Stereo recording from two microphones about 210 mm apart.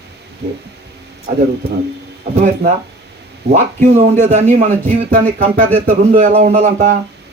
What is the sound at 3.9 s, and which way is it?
Speech, 35° right (ahead or behind).